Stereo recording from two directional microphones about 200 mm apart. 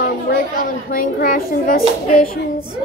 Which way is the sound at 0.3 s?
45° left (ahead or behind).